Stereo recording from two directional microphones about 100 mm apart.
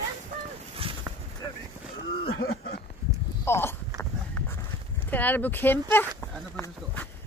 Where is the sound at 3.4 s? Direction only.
25° left (ahead or behind).